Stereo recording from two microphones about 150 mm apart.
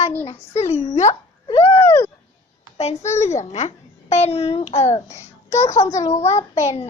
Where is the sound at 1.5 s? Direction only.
35° left (ahead or behind).